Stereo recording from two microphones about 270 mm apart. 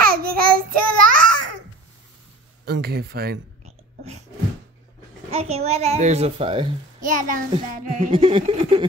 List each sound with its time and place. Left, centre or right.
0.0 s child singing: right
2.6 s speech: right
5.3 s a child's voice: right